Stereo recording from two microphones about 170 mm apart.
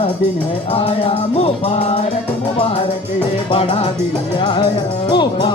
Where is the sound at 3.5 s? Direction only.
35° left (ahead or behind).